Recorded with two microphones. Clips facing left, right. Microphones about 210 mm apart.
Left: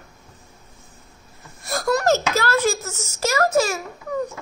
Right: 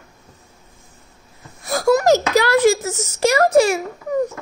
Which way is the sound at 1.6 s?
5° right (ahead or behind).